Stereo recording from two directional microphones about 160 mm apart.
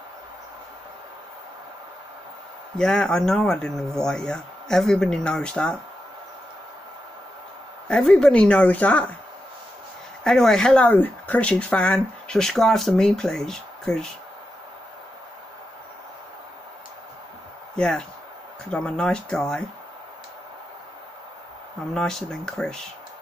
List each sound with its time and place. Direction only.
2.8 s speech: 5° left (ahead or behind)
7.9 s speech: 5° left (ahead or behind)
10.2 s speech: 5° left (ahead or behind)
17.7 s speech: 5° left (ahead or behind)
21.9 s speech: 5° left (ahead or behind)